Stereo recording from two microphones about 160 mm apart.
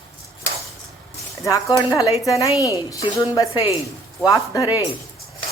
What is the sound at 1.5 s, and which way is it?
A woman's voice, 20° left (ahead or behind).